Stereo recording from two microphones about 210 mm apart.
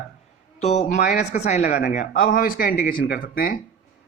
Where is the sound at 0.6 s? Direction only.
35° left (ahead or behind).